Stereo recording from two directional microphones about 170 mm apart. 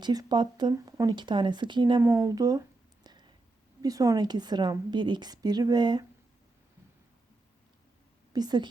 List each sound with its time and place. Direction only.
0.0 s a woman's voice: 25° right (ahead or behind)
8.3 s a woman's voice: 25° right (ahead or behind)